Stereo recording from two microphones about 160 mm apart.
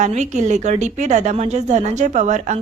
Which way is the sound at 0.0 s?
45° right (ahead or behind).